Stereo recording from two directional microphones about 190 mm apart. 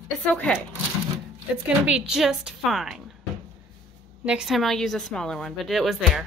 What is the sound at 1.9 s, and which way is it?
Speech, 5° right (ahead or behind).